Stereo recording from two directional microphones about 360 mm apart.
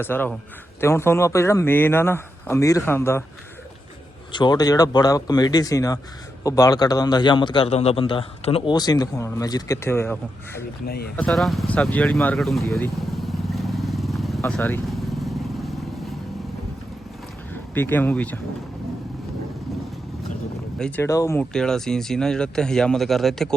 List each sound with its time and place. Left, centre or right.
0.0 s a man's voice: centre
4.3 s a man's voice: centre
10.8 s speech: left
11.2 s vehicle: centre
17.5 s speech: centre
20.7 s speech: centre